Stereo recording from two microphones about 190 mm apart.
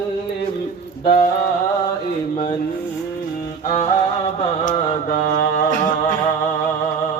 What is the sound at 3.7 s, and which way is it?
Mantra, 35° left (ahead or behind).